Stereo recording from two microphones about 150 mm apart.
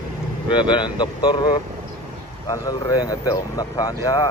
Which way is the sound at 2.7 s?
25° left (ahead or behind).